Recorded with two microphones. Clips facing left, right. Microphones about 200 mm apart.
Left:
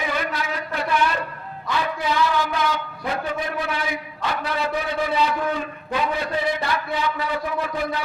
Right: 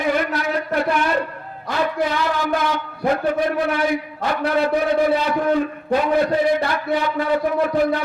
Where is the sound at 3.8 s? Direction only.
55° right (ahead or behind).